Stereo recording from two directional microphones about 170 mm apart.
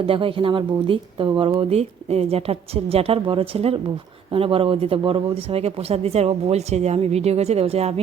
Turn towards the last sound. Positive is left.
turn(degrees=-35)  # may be behind; listen again after turning